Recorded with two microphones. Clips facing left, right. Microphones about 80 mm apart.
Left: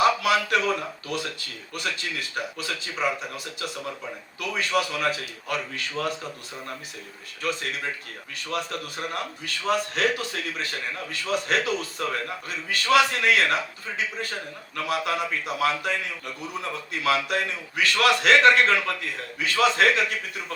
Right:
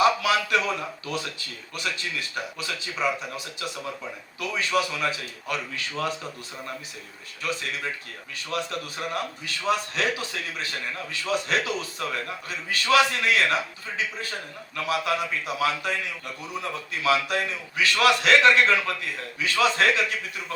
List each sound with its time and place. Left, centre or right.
0.0 s a man's voice: left
7.4 s a man's voice: left